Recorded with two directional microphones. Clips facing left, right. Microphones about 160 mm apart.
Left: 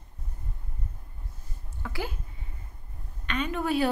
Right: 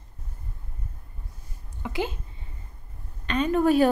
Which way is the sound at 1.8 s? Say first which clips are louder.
Right 6 dB; 20° right (ahead or behind).